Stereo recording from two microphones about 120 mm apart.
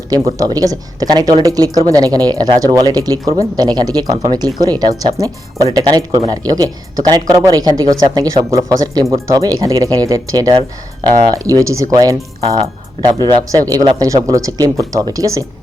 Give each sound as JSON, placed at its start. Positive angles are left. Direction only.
{"t": 0.3, "sound": "speech", "side_deg": -30}